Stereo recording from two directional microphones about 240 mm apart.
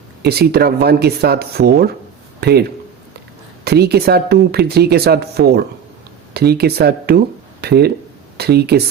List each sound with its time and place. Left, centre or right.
0.2 s speech: right